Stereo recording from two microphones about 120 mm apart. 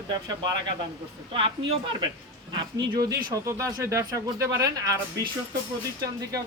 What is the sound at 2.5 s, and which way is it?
Speech, 35° right (ahead or behind).